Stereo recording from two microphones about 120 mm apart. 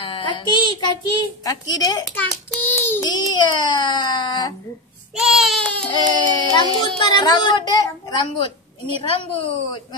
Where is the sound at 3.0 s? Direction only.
35° left (ahead or behind).